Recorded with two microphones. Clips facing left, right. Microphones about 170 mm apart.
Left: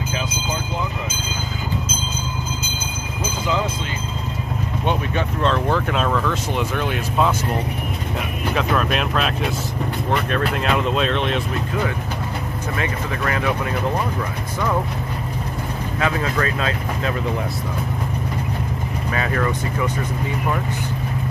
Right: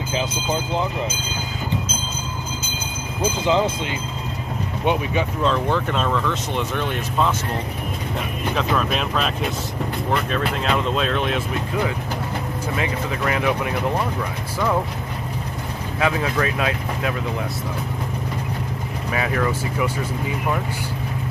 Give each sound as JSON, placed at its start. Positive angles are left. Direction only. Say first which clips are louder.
{"t": 4.8, "sound": "speech", "louder": "right 2 dB", "side_deg": -5}
{"t": 8.5, "sound": "speech", "louder": "left 1 dB", "side_deg": 0}
{"t": 12.7, "sound": "speech", "louder": "even", "side_deg": -15}
{"t": 16.0, "sound": "speech", "louder": "right 1 dB", "side_deg": -10}
{"t": 19.1, "sound": "speech", "louder": "even", "side_deg": -10}